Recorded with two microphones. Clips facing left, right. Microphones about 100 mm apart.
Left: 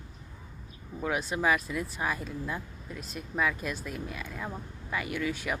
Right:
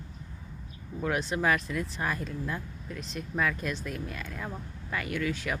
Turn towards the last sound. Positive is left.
turn(degrees=10)  # may be behind; listen again after turning